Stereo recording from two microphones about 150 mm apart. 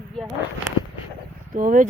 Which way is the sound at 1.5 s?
65° right (ahead or behind).